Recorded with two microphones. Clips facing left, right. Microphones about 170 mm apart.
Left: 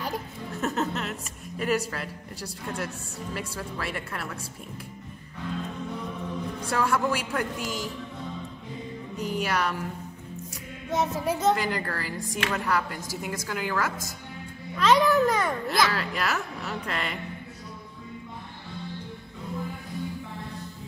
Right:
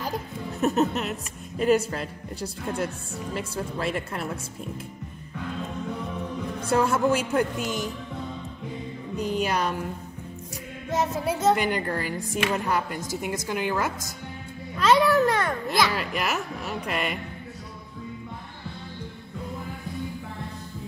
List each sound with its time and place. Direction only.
0.6 s a woman's voice: 20° right (ahead or behind)
6.6 s a woman's voice: 20° right (ahead or behind)
9.1 s a woman's voice: 20° right (ahead or behind)
11.5 s a woman's voice: 20° right (ahead or behind)
14.8 s a child's voice: 5° right (ahead or behind)
15.7 s a woman's voice: 20° right (ahead or behind)